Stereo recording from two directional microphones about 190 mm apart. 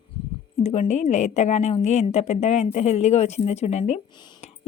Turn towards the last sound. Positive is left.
turn(degrees=35)  # may be behind; listen again after turning